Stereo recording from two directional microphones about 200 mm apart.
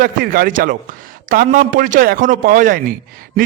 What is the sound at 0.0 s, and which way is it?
A man's voice, 45° right (ahead or behind).